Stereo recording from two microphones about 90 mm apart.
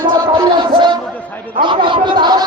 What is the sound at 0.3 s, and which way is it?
Music, 60° right (ahead or behind).